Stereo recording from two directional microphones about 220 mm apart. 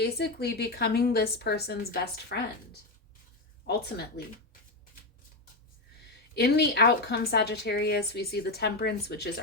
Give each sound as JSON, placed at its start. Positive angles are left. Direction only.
{"t": 0.0, "sound": "a woman's voice", "side_deg": 45}
{"t": 3.7, "sound": "a woman's voice", "side_deg": 45}
{"t": 6.3, "sound": "a woman's voice", "side_deg": 45}